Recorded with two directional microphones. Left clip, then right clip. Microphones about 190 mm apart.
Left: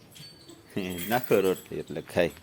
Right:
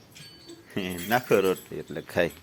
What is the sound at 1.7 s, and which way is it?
Speech, 15° left (ahead or behind).